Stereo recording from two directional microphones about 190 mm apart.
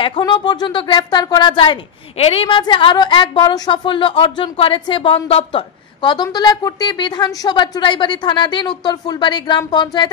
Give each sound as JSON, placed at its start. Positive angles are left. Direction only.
{"t": 0.0, "sound": "a woman's voice", "side_deg": 25}